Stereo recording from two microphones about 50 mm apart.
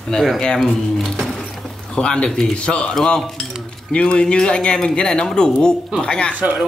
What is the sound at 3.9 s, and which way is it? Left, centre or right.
Speech, centre.